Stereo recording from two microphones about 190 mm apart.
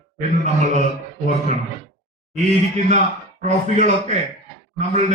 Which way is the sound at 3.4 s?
40° right (ahead or behind).